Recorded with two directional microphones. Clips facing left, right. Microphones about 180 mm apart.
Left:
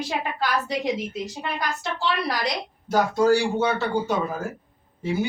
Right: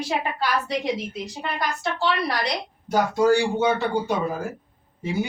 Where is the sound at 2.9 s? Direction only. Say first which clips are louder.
Even; 10° right (ahead or behind).